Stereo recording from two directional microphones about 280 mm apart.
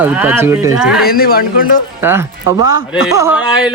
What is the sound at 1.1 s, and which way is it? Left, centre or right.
Speech, left.